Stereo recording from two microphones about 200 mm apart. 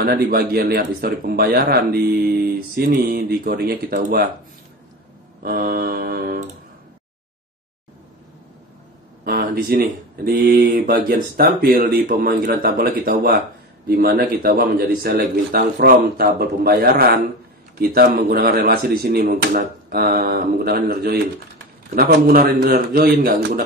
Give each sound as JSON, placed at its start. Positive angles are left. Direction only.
{"t": 0.0, "sound": "a man's voice", "side_deg": -50}
{"t": 5.4, "sound": "a man's voice", "side_deg": -45}
{"t": 9.2, "sound": "a man's voice", "side_deg": -45}